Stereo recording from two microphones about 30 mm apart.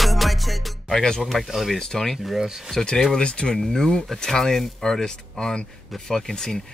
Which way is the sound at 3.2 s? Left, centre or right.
Left.